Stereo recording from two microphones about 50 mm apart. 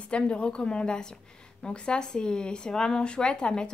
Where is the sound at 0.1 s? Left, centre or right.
Left.